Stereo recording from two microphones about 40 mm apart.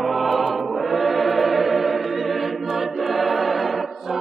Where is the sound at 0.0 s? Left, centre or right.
Centre.